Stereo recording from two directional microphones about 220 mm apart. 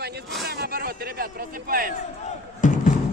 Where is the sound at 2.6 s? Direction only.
35° left (ahead or behind).